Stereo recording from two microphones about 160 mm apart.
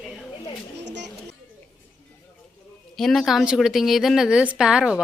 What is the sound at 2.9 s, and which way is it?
A woman's voice, centre (ahead or behind).